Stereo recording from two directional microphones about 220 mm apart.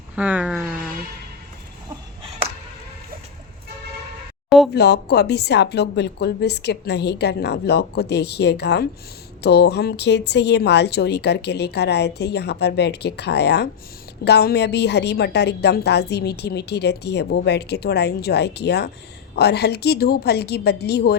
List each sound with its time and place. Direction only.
0.2 s speech: 5° right (ahead or behind)
4.4 s a sound: centre (ahead or behind)
4.7 s a woman's voice: 50° left (ahead or behind)